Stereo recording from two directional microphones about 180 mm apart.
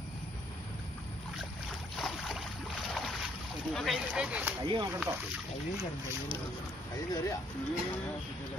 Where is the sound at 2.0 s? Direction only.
Centre (ahead or behind).